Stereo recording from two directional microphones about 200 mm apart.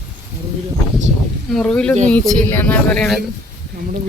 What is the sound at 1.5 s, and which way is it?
Speech, 5° left (ahead or behind).